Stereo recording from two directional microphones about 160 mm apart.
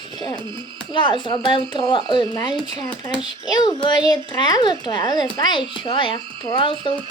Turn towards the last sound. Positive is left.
turn(degrees=30)  # may be behind; listen again after turning